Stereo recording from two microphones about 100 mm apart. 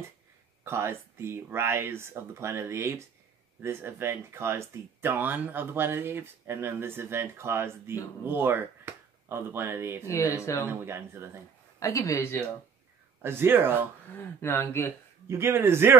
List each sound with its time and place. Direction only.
0.7 s speech: 25° right (ahead or behind)
10.0 s speech: 30° left (ahead or behind)
10.7 s speech: 25° right (ahead or behind)
11.8 s speech: 30° left (ahead or behind)
13.2 s speech: 25° right (ahead or behind)
14.1 s speech: 25° left (ahead or behind)
15.2 s speech: 25° right (ahead or behind)